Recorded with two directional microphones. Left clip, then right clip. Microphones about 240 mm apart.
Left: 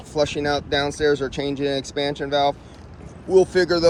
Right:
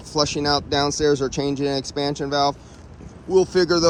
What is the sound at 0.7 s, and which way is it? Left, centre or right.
Speech, centre.